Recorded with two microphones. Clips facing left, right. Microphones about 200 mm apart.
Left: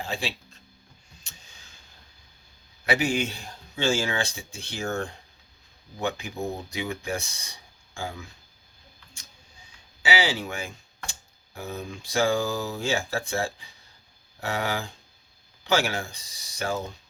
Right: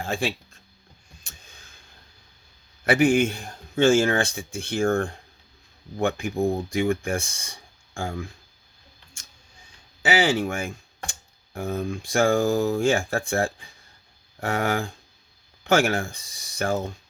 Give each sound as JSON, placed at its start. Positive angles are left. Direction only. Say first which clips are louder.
{"t": 0.0, "sound": "speech", "louder": "right 5 dB", "side_deg": -50}
{"t": 2.8, "sound": "a man's voice", "louder": "right 7 dB", "side_deg": -50}
{"t": 10.0, "sound": "a man's voice", "louder": "right 5 dB", "side_deg": -50}